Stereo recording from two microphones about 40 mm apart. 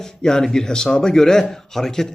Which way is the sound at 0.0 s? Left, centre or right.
Centre.